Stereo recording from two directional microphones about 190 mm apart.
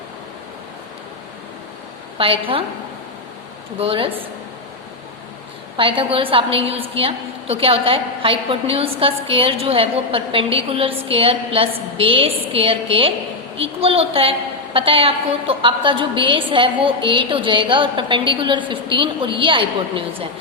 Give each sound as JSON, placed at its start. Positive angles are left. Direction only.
{"t": 2.1, "sound": "a woman's voice", "side_deg": -30}
{"t": 3.8, "sound": "a woman's voice", "side_deg": -30}
{"t": 5.7, "sound": "a woman's voice", "side_deg": -30}